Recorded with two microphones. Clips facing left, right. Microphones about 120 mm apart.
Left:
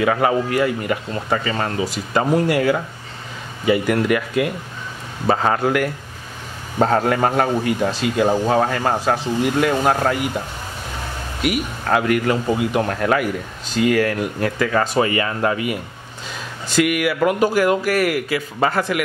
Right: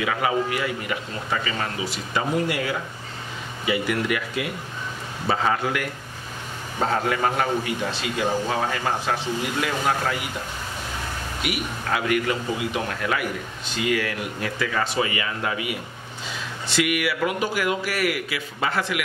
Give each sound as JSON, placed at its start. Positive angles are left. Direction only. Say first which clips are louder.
{"t": 0.0, "sound": "a man's voice", "louder": "left 6 dB", "side_deg": 45}
{"t": 11.4, "sound": "a man's voice", "louder": "left 8 dB", "side_deg": 45}
{"t": 16.6, "sound": "a man's voice", "louder": "left 6 dB", "side_deg": 45}